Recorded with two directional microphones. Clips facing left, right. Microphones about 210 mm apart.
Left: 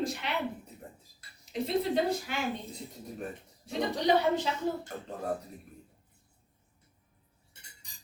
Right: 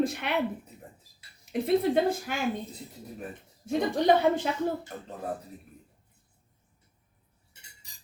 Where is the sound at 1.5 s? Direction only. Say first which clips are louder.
Right 5 dB; 55° right (ahead or behind).